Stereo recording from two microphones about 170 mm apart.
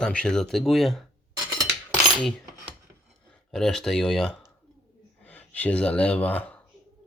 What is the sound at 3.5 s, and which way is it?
Speech, 5° left (ahead or behind).